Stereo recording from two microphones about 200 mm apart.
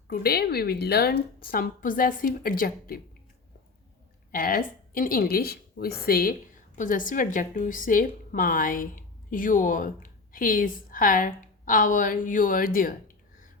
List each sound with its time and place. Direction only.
0.1 s a woman's voice: 50° left (ahead or behind)
4.3 s a woman's voice: 45° left (ahead or behind)